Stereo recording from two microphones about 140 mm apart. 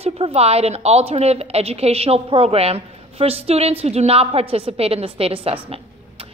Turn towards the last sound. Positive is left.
turn(degrees=-40)  # may be behind; listen again after turning